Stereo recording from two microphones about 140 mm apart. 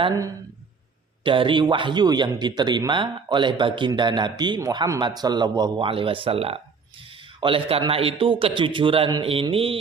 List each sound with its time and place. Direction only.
1.2 s speech: 35° right (ahead or behind)